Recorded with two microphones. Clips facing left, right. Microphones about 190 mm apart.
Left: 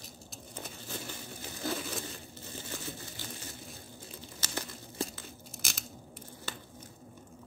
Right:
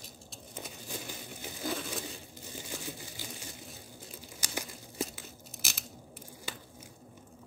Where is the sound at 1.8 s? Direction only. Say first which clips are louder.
Even; centre (ahead or behind).